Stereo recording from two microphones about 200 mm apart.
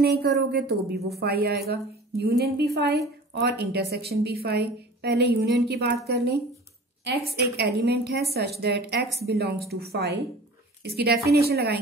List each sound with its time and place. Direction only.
0.0 s a woman's voice: 55° right (ahead or behind)
7.5 s a woman's voice: 55° right (ahead or behind)